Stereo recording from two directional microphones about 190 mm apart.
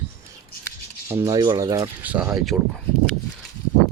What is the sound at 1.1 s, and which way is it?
Speech, 15° right (ahead or behind).